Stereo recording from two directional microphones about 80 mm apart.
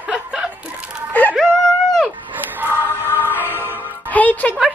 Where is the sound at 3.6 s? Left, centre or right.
Right.